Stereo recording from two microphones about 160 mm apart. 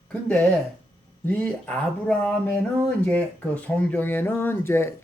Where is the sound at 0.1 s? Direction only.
10° left (ahead or behind).